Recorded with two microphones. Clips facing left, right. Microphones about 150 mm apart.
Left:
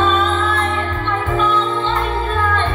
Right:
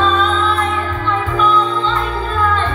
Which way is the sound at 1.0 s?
25° left (ahead or behind).